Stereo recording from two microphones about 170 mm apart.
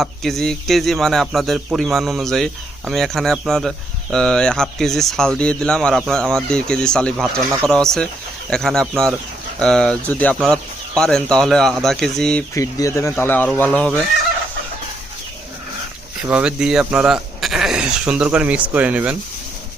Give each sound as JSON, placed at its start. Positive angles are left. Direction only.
{"t": 0.0, "sound": "speech", "side_deg": 0}
{"t": 12.5, "sound": "speech", "side_deg": 20}
{"t": 16.2, "sound": "speech", "side_deg": -5}